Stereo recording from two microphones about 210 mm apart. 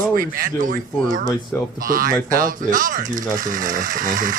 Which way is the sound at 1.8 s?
40° right (ahead or behind).